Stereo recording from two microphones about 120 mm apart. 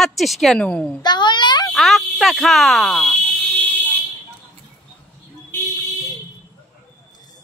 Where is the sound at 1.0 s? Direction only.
40° left (ahead or behind).